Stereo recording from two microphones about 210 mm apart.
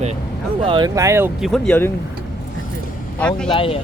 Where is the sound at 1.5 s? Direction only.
5° left (ahead or behind).